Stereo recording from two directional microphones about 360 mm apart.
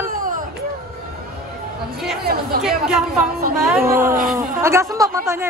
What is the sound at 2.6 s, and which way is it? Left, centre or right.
Speech, centre.